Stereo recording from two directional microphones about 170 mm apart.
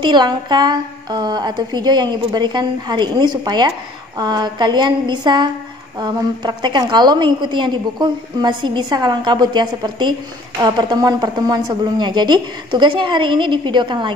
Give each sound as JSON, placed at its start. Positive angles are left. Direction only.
{"t": 0.0, "sound": "a woman's voice", "side_deg": -25}